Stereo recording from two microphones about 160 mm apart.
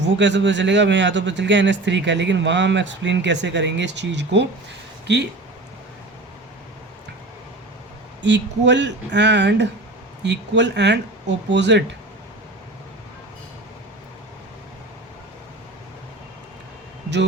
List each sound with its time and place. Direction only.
0.3 s speech: 90° right
8.2 s speech: 90° right